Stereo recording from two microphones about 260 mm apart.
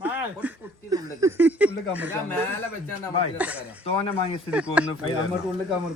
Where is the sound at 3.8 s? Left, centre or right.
Left.